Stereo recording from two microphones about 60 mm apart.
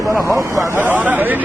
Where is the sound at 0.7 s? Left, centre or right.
Right.